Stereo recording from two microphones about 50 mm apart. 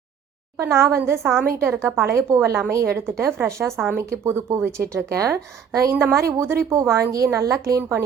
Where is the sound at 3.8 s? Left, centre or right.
Right.